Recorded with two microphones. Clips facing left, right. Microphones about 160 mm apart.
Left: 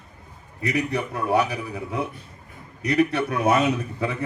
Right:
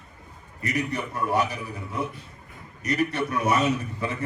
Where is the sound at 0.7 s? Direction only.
60° left (ahead or behind).